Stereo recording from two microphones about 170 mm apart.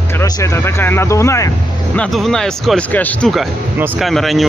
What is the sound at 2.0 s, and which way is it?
Speech, centre (ahead or behind).